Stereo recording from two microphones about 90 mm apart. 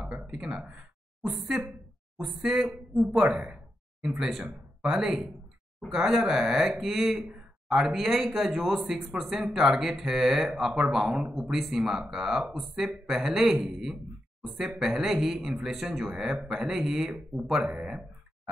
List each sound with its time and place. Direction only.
0.0 s a man's voice: 10° right (ahead or behind)